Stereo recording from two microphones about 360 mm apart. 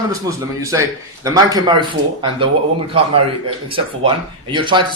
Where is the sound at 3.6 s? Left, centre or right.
Centre.